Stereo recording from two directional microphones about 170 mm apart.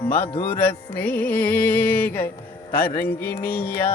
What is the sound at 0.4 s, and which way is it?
Music, 10° left (ahead or behind).